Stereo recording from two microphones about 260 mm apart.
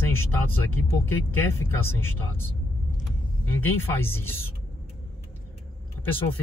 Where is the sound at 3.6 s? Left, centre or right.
Centre.